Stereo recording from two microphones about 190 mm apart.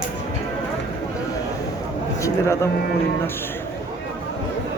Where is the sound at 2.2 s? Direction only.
15° left (ahead or behind).